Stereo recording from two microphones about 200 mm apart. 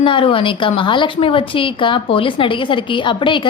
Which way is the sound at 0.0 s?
25° left (ahead or behind).